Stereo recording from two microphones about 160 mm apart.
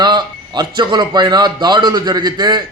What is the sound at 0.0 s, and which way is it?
A man's voice, 25° right (ahead or behind).